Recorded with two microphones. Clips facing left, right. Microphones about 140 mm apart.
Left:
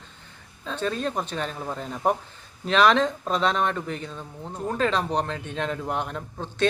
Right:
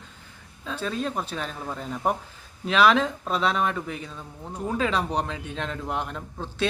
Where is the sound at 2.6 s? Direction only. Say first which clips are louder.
Left 1 dB; 5° right (ahead or behind).